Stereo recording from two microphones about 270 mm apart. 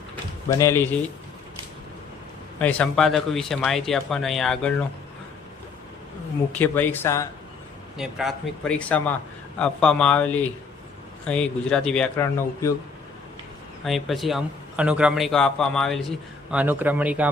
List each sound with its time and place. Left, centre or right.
0.5 s speech: centre
2.6 s a man's voice: centre
6.6 s speech: centre
7.9 s a man's voice: centre
13.8 s a man's voice: centre